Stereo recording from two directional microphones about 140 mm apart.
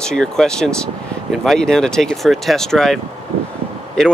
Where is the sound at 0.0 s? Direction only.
5° left (ahead or behind).